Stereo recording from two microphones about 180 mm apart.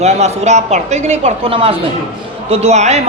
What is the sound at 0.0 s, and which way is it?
A woman's voice, 35° right (ahead or behind).